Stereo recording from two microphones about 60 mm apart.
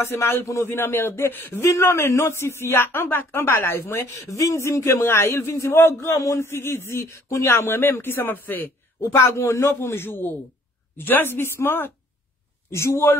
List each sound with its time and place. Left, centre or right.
0.0 s a man's voice: left
12.7 s a man's voice: left